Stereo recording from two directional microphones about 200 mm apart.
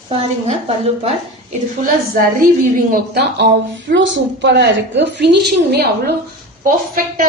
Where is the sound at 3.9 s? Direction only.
65° right (ahead or behind).